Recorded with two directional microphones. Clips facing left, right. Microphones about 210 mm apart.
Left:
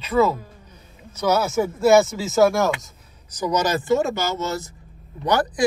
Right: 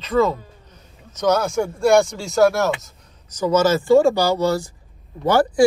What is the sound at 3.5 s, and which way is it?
Speech, 15° left (ahead or behind).